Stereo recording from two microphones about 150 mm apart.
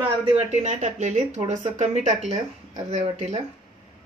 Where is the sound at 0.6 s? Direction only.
50° right (ahead or behind).